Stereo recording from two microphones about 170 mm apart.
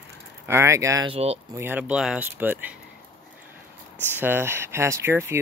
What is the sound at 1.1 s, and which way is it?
Speech, 35° right (ahead or behind).